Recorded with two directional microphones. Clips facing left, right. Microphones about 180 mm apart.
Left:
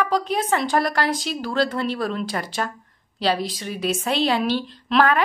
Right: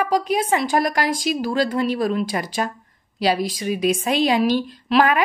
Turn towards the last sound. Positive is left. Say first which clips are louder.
# right 1 dB
turn(degrees=-10)  # may be behind; listen again after turning